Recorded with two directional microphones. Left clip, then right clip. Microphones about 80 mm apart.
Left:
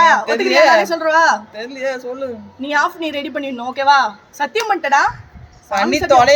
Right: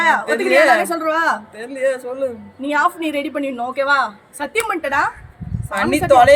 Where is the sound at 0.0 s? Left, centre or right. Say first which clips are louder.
Left 4 dB; right.